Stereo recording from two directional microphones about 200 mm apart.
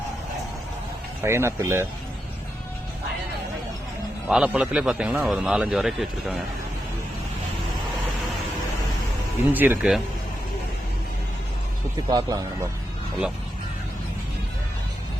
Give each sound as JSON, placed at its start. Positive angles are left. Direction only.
{"t": 1.2, "sound": "speech", "side_deg": -15}
{"t": 4.3, "sound": "a man's voice", "side_deg": -5}
{"t": 9.5, "sound": "speech", "side_deg": -10}
{"t": 12.0, "sound": "speech", "side_deg": -20}